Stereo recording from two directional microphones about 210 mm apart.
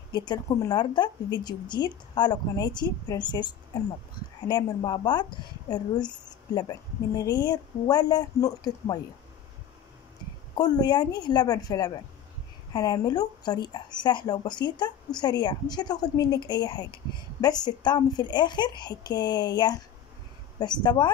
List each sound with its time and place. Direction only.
0.1 s speech: 20° left (ahead or behind)
10.5 s speech: 20° left (ahead or behind)